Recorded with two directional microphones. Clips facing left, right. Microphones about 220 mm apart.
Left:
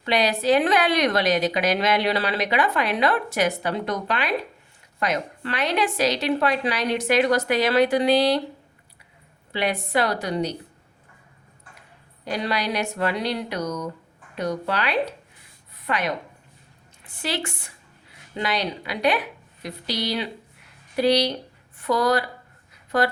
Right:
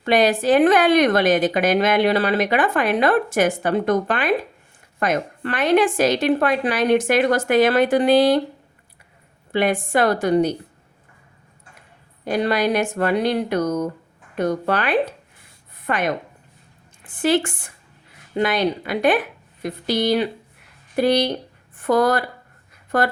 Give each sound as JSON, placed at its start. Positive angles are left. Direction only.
{"t": 0.0, "sound": "a woman's voice", "side_deg": -50}
{"t": 9.5, "sound": "a woman's voice", "side_deg": -50}
{"t": 12.2, "sound": "a woman's voice", "side_deg": -50}
{"t": 15.7, "sound": "a sound", "side_deg": -50}
{"t": 17.0, "sound": "a woman's voice", "side_deg": -50}